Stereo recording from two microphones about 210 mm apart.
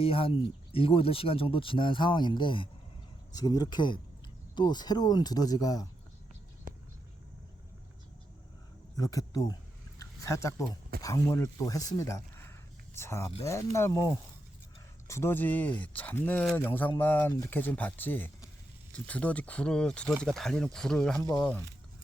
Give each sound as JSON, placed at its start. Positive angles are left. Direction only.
{"t": 0.0, "sound": "speech", "side_deg": 25}
{"t": 9.0, "sound": "speech", "side_deg": 15}
{"t": 10.0, "sound": "a sound", "side_deg": 15}
{"t": 11.0, "sound": "speech", "side_deg": 15}